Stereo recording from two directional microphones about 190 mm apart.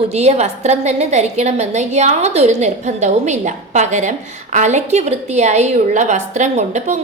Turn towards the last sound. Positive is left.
turn(degrees=-35)  # may be behind; listen again after turning